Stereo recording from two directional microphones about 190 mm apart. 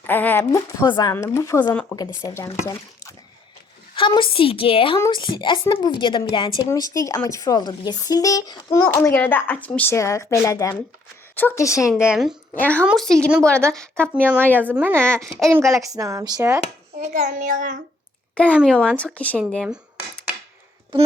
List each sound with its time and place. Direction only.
0.1 s a woman's voice: 10° left (ahead or behind)
12.1 s speech: 5° right (ahead or behind)
12.5 s speech: 10° left (ahead or behind)
12.8 s speech: centre (ahead or behind)
14.2 s speech: 10° right (ahead or behind)
16.9 s a child's voice: 35° right (ahead or behind)
18.7 s speech: 5° left (ahead or behind)